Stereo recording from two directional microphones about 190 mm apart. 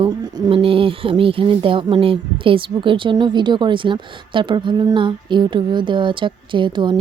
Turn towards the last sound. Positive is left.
turn(degrees=-25)  # may be behind; listen again after turning